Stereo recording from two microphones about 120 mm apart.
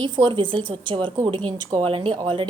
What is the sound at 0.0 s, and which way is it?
A woman's voice, 40° right (ahead or behind).